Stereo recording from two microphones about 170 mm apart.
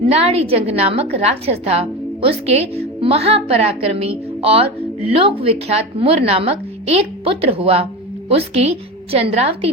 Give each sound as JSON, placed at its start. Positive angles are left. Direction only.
{"t": 0.1, "sound": "a woman's voice", "side_deg": -35}